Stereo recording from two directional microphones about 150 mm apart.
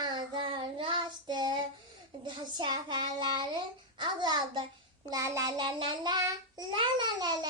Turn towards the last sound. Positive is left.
turn(degrees=-30)  # may be behind; listen again after turning